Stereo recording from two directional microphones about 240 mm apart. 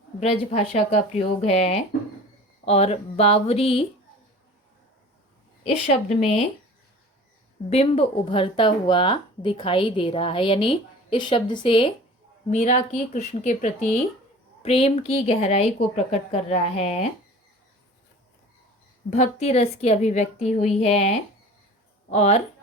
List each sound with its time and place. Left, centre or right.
0.2 s speech: left
5.6 s speech: left
7.7 s speech: left
19.1 s speech: left
22.1 s speech: left